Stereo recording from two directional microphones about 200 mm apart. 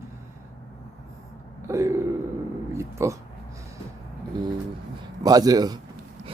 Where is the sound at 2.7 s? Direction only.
15° right (ahead or behind).